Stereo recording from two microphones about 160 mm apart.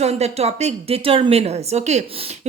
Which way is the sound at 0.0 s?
40° right (ahead or behind).